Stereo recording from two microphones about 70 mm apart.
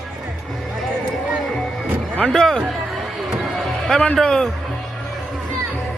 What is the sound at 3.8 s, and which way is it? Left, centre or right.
Speech, centre.